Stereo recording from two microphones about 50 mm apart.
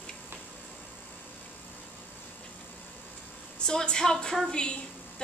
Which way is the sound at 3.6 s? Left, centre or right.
Centre.